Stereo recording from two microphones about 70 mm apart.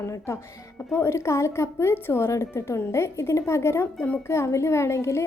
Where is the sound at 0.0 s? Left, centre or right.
Left.